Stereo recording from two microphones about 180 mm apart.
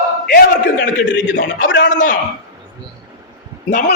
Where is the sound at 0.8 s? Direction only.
85° left.